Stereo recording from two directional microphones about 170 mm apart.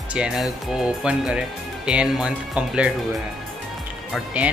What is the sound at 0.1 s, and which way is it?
Speech, 5° right (ahead or behind).